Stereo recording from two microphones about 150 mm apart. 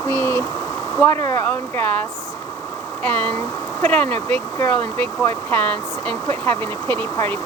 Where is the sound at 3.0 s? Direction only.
10° left (ahead or behind).